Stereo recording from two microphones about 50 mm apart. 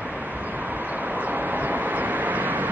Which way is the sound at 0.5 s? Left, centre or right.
Right.